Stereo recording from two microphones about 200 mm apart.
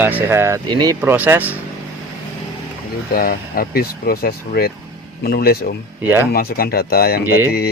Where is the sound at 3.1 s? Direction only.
50° left (ahead or behind).